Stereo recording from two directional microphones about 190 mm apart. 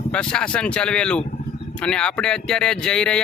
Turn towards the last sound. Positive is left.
turn(degrees=5)  # may be behind; listen again after turning